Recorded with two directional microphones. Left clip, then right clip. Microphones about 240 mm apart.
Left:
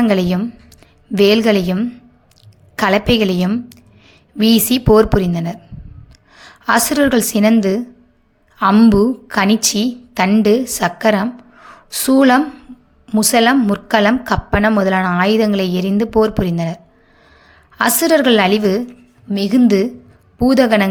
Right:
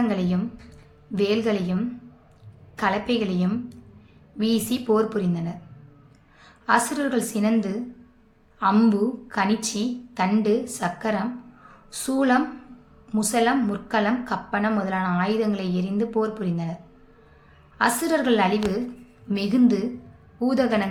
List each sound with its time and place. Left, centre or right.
0.0 s a woman's voice: left
19.3 s speech: left